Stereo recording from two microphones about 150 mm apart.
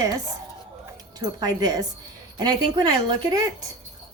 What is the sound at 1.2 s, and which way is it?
A woman's voice, 25° right (ahead or behind).